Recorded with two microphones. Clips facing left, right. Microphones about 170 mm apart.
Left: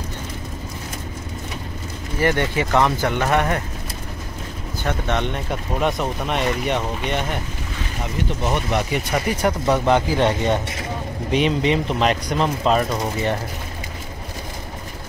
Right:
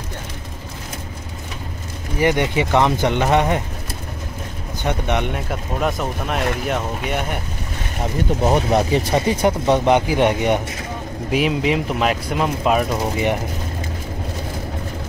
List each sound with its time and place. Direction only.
2.1 s speech: 15° right (ahead or behind)
4.8 s speech: 15° right (ahead or behind)
8.5 s speech: 35° right (ahead or behind); by 10.6 s 15° right (ahead or behind)
11.2 s speech: 5° right (ahead or behind)